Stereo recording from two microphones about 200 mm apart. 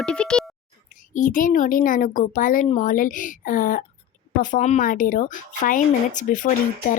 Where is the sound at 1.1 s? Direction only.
40° left (ahead or behind).